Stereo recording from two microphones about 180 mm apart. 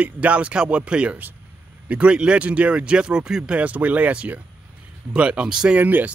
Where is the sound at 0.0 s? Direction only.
5° right (ahead or behind).